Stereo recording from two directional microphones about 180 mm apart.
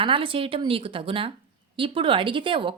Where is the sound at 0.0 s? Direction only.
30° right (ahead or behind).